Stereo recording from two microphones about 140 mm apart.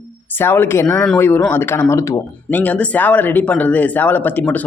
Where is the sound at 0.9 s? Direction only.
5° left (ahead or behind).